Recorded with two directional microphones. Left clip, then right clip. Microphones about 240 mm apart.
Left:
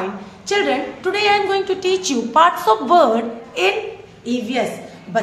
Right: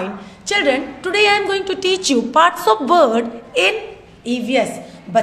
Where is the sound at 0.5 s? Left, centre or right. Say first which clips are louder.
Right 2 dB; right.